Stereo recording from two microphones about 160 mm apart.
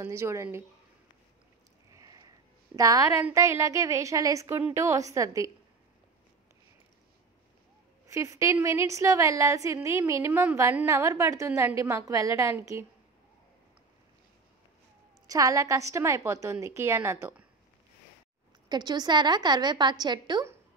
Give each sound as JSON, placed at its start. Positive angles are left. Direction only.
{"t": 0.0, "sound": "a woman's voice", "side_deg": -15}
{"t": 1.9, "sound": "a sound", "side_deg": -20}
{"t": 3.3, "sound": "a woman's voice", "side_deg": -20}
{"t": 8.1, "sound": "a woman's voice", "side_deg": -20}
{"t": 15.2, "sound": "a woman's voice", "side_deg": -20}
{"t": 18.7, "sound": "a woman's voice", "side_deg": -25}